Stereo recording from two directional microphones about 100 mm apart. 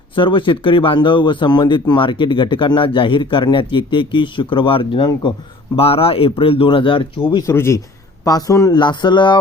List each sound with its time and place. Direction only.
0.2 s speech: 55° left (ahead or behind)
5.7 s speech: 75° left (ahead or behind); by 7.4 s 50° left (ahead or behind)
7.4 s a man's voice: 25° left (ahead or behind)
8.7 s speech: 50° left (ahead or behind)